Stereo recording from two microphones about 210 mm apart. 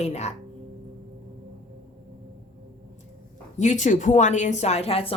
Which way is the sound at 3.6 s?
35° left (ahead or behind).